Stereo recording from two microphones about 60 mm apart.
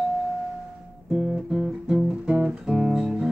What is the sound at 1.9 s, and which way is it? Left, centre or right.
Music, centre.